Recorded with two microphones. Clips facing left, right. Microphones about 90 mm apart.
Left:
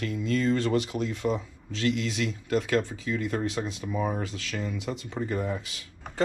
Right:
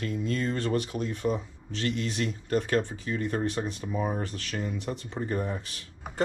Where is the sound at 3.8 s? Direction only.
20° right (ahead or behind).